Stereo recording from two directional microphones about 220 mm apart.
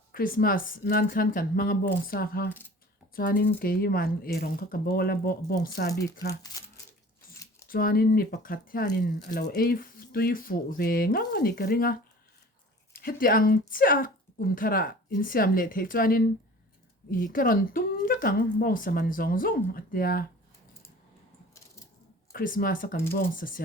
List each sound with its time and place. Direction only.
0.1 s speech: 40° left (ahead or behind)
2.5 s speech: 10° left (ahead or behind)
3.2 s speech: 40° left (ahead or behind)
7.7 s a woman's voice: 40° left (ahead or behind)
22.3 s speech: 40° left (ahead or behind)